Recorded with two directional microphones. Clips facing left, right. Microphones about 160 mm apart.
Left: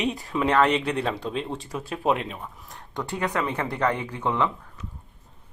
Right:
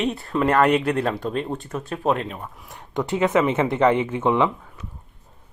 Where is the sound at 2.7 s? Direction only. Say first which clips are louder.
Right 8 dB; 20° right (ahead or behind).